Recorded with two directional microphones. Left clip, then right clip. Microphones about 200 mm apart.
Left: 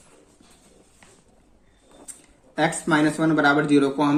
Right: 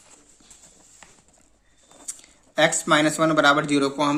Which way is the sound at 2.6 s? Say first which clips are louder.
Right 2 dB; 35° right (ahead or behind).